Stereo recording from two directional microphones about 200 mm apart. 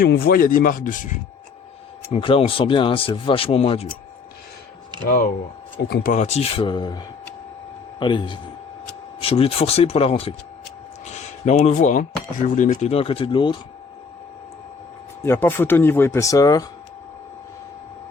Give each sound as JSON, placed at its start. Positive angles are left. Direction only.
{"t": 0.0, "sound": "speech", "side_deg": 50}
{"t": 2.1, "sound": "speech", "side_deg": 30}
{"t": 5.0, "sound": "speech", "side_deg": 45}
{"t": 15.2, "sound": "speech", "side_deg": 10}